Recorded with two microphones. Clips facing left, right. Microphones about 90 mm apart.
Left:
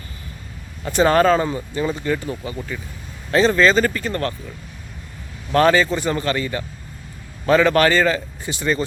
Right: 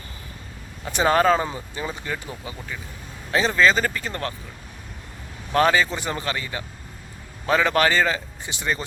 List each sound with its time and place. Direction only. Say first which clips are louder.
0.9 s speech: left 3 dB; 15° right (ahead or behind)
5.5 s speech: left 4 dB; 15° right (ahead or behind)